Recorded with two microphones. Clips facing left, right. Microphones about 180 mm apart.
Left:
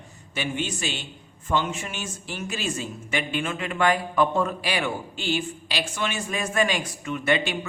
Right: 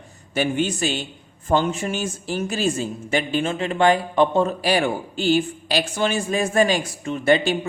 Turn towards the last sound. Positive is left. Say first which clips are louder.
# right 6 dB
turn(degrees=-30)  # may be behind; listen again after turning